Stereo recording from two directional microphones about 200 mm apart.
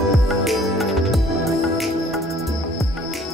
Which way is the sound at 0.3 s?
Centre (ahead or behind).